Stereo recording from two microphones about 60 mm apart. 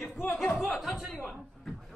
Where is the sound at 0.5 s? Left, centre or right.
Centre.